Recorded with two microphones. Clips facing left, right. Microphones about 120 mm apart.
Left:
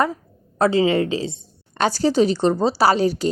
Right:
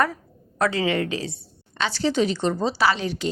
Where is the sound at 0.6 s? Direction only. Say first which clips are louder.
Left 5 dB; 30° left (ahead or behind).